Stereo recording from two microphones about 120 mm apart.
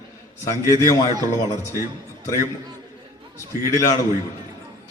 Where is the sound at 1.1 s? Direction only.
25° right (ahead or behind).